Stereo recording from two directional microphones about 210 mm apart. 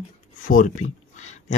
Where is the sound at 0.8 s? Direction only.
35° left (ahead or behind).